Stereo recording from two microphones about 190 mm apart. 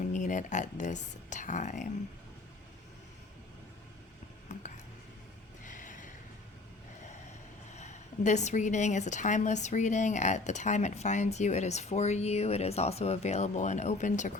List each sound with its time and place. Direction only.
0.1 s a woman's voice: 40° left (ahead or behind)
5.6 s a sound: 45° left (ahead or behind)
7.8 s a woman's voice: 40° left (ahead or behind)